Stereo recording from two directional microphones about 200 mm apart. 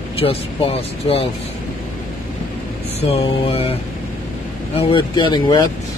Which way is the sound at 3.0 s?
30° left (ahead or behind).